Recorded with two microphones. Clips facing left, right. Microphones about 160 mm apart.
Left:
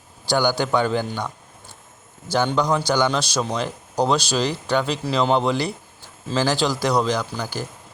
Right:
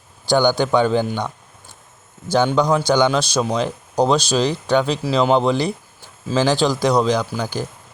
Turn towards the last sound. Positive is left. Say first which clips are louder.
# right 4 dB
turn(degrees=-15)  # may be behind; listen again after turning